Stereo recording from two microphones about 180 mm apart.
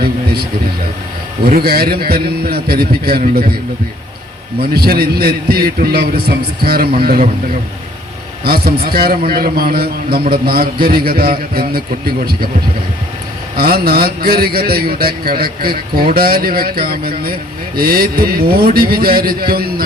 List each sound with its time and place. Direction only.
1.5 s a man's voice: 55° right (ahead or behind)
4.6 s a man's voice: 55° right (ahead or behind)
8.4 s a man's voice: 55° right (ahead or behind)
13.6 s a man's voice: 60° right (ahead or behind)